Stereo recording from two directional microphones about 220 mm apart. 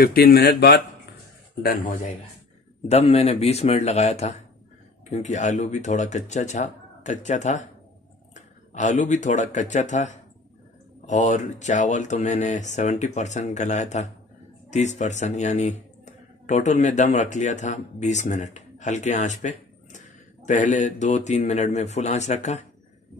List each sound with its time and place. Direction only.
0.0 s speech: 45° left (ahead or behind)
2.9 s speech: 30° left (ahead or behind)
8.7 s speech: 35° left (ahead or behind)